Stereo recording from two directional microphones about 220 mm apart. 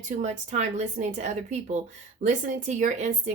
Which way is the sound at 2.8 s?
30° right (ahead or behind).